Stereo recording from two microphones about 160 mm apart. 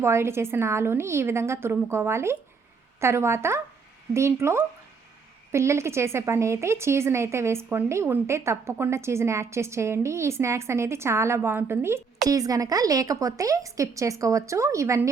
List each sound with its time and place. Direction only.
0.0 s a woman's voice: 15° right (ahead or behind)